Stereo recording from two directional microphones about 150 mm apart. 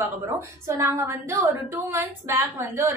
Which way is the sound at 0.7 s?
20° right (ahead or behind).